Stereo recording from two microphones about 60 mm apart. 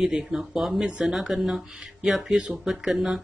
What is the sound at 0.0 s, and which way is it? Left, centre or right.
Speech, centre.